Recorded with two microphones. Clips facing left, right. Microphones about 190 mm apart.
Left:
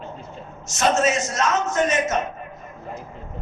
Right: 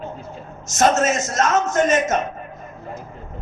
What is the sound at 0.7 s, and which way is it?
A man's voice, 45° right (ahead or behind).